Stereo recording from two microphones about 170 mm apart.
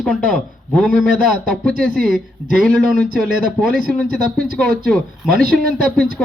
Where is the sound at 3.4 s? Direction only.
5° left (ahead or behind).